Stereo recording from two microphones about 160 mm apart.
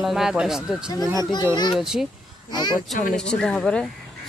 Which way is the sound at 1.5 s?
25° left (ahead or behind).